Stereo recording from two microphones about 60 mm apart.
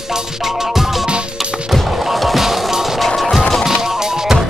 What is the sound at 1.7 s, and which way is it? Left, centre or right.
Music, centre.